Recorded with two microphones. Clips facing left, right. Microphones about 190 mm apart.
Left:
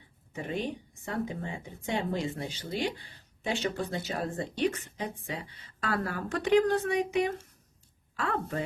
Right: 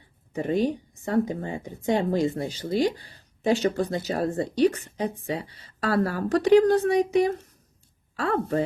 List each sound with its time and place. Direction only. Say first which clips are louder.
0.3 s a woman's voice: right 9 dB; 40° right (ahead or behind)